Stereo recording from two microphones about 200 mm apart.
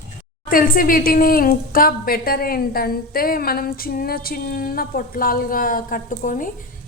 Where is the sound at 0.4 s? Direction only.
45° left (ahead or behind).